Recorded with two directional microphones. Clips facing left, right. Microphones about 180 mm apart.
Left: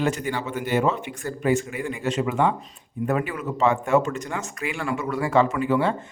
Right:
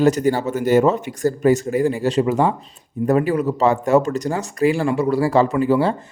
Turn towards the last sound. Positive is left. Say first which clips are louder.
# right 5 dB
turn(degrees=-35)  # may be behind; listen again after turning